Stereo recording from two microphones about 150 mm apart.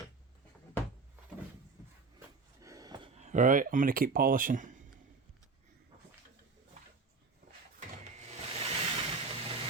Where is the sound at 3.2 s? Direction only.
55° right (ahead or behind).